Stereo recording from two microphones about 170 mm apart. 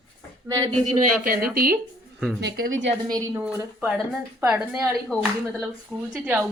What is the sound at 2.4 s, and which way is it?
Speech, 70° right (ahead or behind).